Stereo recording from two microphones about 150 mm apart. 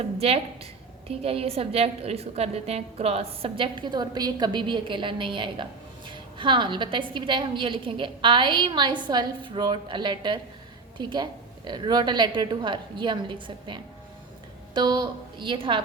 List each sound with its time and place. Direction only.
0.0 s a woman's voice: 40° right (ahead or behind)